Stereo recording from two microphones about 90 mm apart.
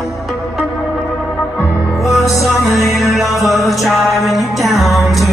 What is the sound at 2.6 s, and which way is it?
Music, centre (ahead or behind).